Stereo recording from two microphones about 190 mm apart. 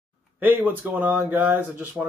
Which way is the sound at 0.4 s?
10° right (ahead or behind).